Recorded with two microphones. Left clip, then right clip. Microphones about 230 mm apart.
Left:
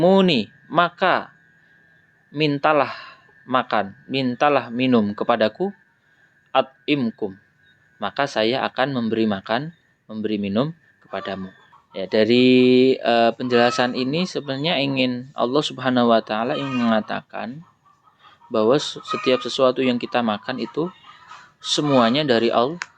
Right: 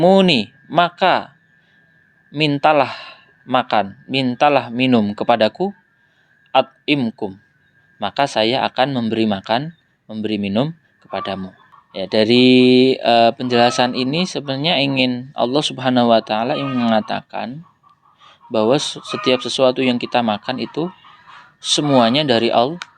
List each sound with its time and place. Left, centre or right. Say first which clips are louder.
0.0 s speech: right 4 dB; right
2.3 s a man's voice: right 4 dB; right